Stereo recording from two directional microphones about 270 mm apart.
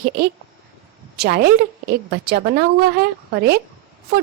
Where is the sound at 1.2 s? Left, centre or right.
Right.